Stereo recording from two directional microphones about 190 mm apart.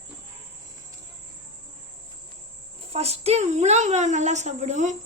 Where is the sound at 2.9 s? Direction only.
35° right (ahead or behind).